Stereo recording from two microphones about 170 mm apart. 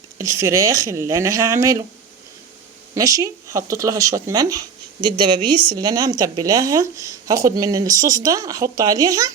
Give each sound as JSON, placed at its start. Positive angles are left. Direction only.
{"t": 0.2, "sound": "speech", "side_deg": -15}
{"t": 2.9, "sound": "speech", "side_deg": -20}